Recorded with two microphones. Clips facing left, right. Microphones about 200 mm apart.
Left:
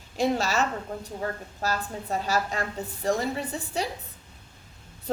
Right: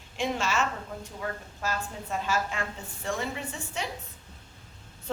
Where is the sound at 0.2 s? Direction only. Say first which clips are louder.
Left 4 dB; 40° left (ahead or behind).